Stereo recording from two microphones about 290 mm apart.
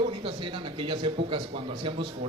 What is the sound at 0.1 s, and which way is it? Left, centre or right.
Speech, centre.